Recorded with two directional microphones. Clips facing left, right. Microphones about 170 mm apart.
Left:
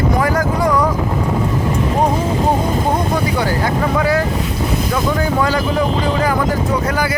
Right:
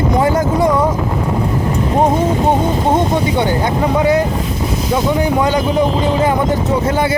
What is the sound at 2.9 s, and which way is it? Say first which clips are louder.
Speech: right 3 dB; 25° right (ahead or behind).